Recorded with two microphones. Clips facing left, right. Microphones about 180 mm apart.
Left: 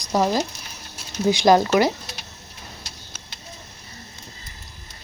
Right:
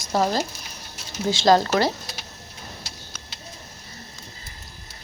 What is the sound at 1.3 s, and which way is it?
Speech, 15° left (ahead or behind).